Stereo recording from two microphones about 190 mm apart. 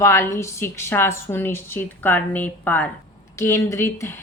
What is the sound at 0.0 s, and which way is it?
A woman's voice, 15° left (ahead or behind).